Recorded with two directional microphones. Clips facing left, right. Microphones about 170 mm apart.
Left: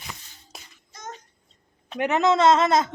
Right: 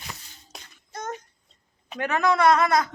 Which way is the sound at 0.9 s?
55° right (ahead or behind).